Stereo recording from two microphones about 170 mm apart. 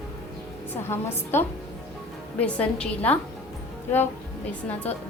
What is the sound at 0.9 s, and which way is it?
A woman's voice, 15° left (ahead or behind).